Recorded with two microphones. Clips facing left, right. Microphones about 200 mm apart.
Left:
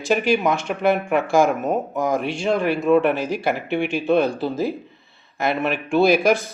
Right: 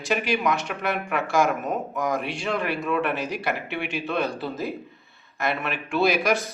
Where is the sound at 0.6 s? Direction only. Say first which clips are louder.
Left 8 dB; 50° left (ahead or behind).